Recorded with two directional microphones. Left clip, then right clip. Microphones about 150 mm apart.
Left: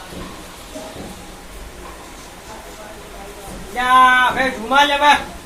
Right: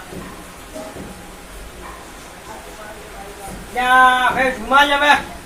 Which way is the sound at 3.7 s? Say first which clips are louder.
Even; centre (ahead or behind).